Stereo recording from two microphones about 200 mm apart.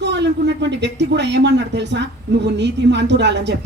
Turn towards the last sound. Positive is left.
turn(degrees=-60)  # may be behind; listen again after turning